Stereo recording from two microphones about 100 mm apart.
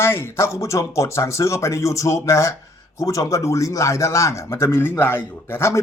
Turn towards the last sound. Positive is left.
turn(degrees=25)  # may be behind; listen again after turning